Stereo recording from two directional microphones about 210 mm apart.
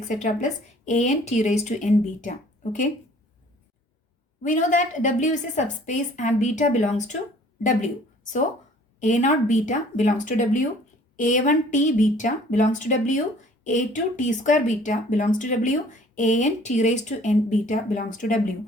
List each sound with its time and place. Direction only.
0.1 s speech: 35° left (ahead or behind)
4.4 s a woman's voice: 40° left (ahead or behind)